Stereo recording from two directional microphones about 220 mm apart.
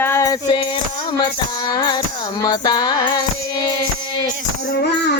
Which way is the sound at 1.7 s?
20° left (ahead or behind).